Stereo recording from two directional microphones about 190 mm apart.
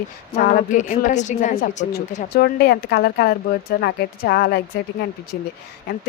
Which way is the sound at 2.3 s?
55° left (ahead or behind).